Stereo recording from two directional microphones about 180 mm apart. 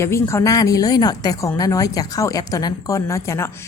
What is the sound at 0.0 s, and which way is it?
A woman's voice, 15° left (ahead or behind).